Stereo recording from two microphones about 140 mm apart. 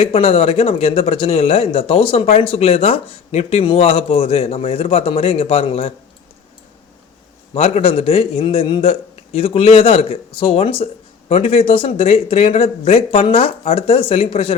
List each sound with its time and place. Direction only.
0.0 s speech: 45° left (ahead or behind)
7.5 s speech: 45° left (ahead or behind)